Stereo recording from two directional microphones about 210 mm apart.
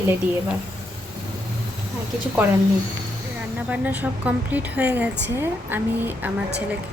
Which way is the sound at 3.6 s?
5° right (ahead or behind).